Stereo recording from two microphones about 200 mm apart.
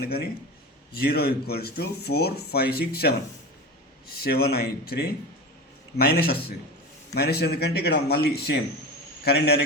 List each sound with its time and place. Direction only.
0.0 s speech: 50° left (ahead or behind)
4.2 s speech: 50° left (ahead or behind)